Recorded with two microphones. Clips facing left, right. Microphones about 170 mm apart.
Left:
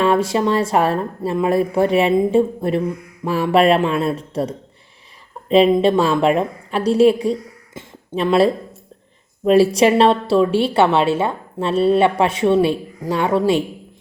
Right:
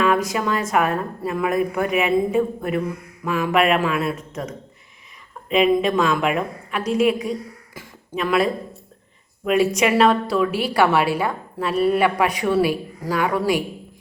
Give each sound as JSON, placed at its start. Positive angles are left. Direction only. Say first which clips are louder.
{"t": 0.0, "sound": "a woman's voice", "louder": "left 4 dB", "side_deg": 30}